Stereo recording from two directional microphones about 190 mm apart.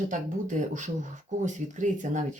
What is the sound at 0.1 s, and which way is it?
Speech, 40° right (ahead or behind).